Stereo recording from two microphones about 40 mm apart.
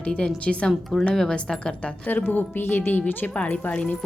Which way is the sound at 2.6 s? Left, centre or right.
Left.